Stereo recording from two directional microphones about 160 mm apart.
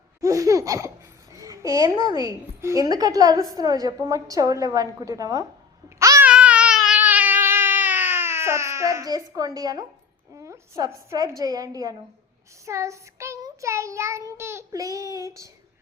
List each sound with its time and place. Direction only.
0.2 s laughter: 20° right (ahead or behind)
1.3 s a woman's voice: 20° right (ahead or behind)
3.5 s child singing: 25° right (ahead or behind)
6.0 s babbling: 20° right (ahead or behind)
6.2 s baby cry: 10° right (ahead or behind)
7.0 s cat: 10° right (ahead or behind)
10.3 s child singing: 20° right (ahead or behind)